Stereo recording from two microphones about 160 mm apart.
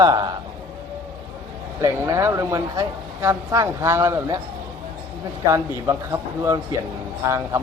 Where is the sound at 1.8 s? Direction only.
20° right (ahead or behind).